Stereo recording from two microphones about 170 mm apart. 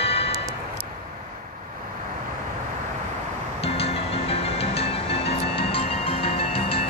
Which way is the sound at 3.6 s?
35° left (ahead or behind).